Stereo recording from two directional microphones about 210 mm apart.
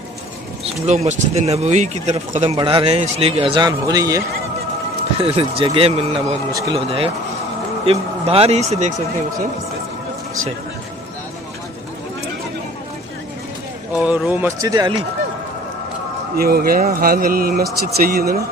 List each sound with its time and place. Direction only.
0.7 s a man's voice: 30° right (ahead or behind)
5.2 s a man's voice: 25° right (ahead or behind)
13.9 s speech: 5° right (ahead or behind)
16.3 s speech: 45° right (ahead or behind)